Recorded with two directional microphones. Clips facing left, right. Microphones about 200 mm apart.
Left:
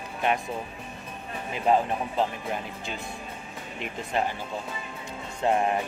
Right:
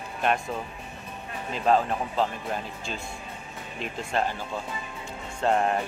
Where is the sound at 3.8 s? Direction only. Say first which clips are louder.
Even; 15° left (ahead or behind).